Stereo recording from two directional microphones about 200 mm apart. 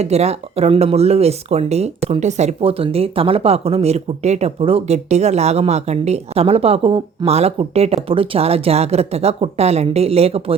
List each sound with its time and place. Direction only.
0.0 s speech: 30° right (ahead or behind)